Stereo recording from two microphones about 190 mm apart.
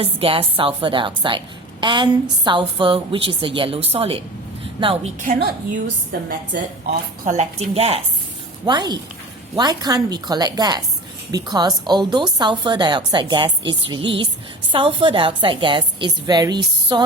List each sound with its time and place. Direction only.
0.0 s a woman's voice: 30° right (ahead or behind)
4.6 s a sound: 30° right (ahead or behind)
5.2 s a woman's voice: 45° right (ahead or behind)
7.3 s a woman's voice: 35° right (ahead or behind)